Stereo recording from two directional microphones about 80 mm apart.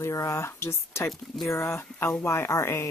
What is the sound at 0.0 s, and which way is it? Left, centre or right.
Speech, left.